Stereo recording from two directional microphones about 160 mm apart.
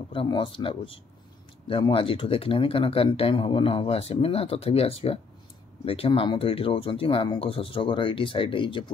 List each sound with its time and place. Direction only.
0.1 s speech: 30° left (ahead or behind)